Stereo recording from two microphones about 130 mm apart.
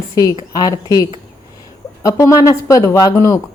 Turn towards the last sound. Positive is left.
turn(degrees=25)  # may be behind; listen again after turning